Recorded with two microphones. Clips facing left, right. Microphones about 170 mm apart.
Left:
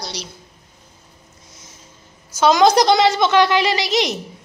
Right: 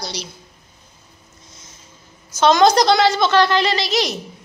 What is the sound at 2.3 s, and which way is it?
A woman's voice, 10° left (ahead or behind).